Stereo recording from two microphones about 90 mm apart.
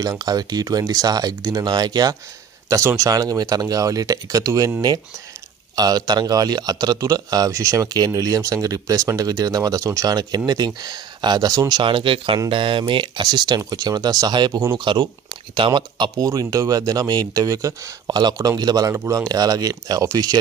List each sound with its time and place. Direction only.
0.0 s speech: 45° right (ahead or behind)
5.8 s speech: 50° right (ahead or behind)
11.8 s speech: 70° right (ahead or behind); by 14.8 s 45° right (ahead or behind)
14.8 s speech: 60° right (ahead or behind)
16.3 s speech: 40° right (ahead or behind)
18.9 s speech: 35° right (ahead or behind)